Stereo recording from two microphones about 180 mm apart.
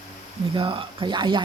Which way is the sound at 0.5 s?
30° right (ahead or behind).